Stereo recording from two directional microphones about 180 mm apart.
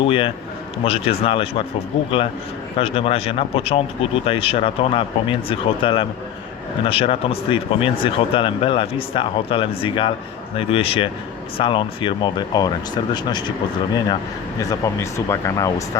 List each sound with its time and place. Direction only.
0.0 s speech: 30° left (ahead or behind)
2.7 s speech: 35° left (ahead or behind)
14.6 s speech: 15° left (ahead or behind)